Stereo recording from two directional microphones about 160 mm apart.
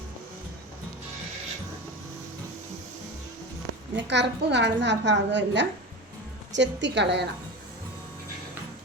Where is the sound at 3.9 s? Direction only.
90° right.